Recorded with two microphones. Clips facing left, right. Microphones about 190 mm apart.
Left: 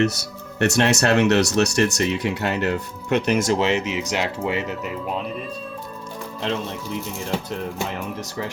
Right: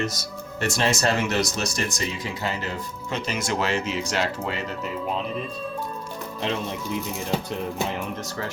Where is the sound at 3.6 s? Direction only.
20° left (ahead or behind).